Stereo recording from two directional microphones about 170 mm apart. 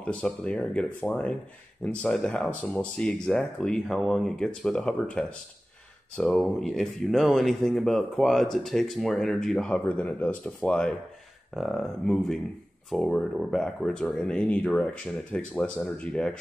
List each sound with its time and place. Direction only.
0.0 s speech: 10° left (ahead or behind)